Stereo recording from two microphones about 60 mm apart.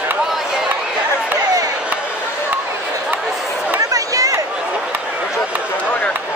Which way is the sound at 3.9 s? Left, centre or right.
Right.